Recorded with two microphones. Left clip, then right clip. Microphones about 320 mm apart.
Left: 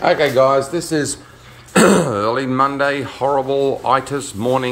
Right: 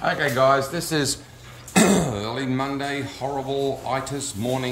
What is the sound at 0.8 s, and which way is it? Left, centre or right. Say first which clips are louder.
Speech: left 4 dB; centre.